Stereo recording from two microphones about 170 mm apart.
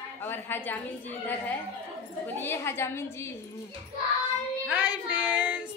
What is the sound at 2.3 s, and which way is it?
Speech, 15° left (ahead or behind).